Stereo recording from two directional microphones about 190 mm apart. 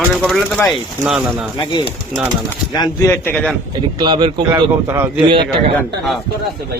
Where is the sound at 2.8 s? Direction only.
15° left (ahead or behind).